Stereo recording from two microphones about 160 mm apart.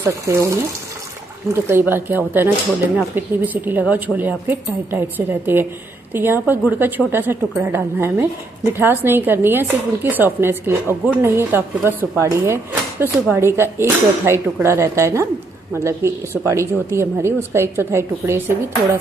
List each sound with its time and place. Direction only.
0.0 s a woman's voice: 20° right (ahead or behind)